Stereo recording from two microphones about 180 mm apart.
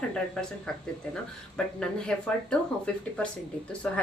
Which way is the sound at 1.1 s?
5° left (ahead or behind).